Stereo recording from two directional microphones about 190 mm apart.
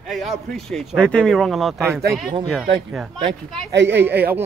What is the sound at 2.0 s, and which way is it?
Speech, 55° right (ahead or behind).